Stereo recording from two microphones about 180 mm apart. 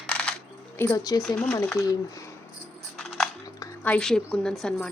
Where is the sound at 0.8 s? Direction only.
20° left (ahead or behind).